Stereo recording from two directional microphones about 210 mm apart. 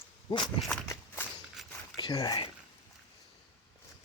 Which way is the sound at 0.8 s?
15° left (ahead or behind).